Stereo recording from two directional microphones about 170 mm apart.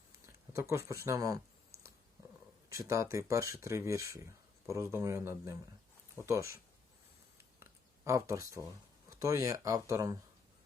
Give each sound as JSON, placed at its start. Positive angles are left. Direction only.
{"t": 0.3, "sound": "speech", "side_deg": -15}
{"t": 2.7, "sound": "speech", "side_deg": -15}
{"t": 7.3, "sound": "a sound", "side_deg": -15}
{"t": 9.0, "sound": "speech", "side_deg": -20}